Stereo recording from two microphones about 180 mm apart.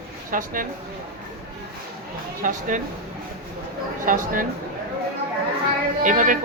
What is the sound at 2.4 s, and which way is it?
Speech, 45° right (ahead or behind).